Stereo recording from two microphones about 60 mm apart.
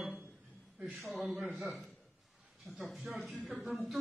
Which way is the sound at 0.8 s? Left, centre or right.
Centre.